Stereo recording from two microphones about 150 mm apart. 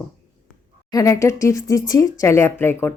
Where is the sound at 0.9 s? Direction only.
20° left (ahead or behind).